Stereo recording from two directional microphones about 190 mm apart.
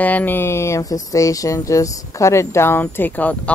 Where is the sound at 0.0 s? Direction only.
10° left (ahead or behind).